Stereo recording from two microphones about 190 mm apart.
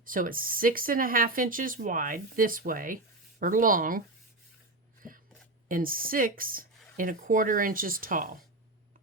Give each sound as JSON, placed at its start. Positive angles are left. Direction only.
{"t": 0.0, "sound": "speech", "side_deg": -45}
{"t": 5.6, "sound": "speech", "side_deg": -45}